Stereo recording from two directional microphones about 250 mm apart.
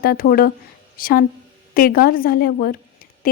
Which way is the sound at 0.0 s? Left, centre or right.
Left.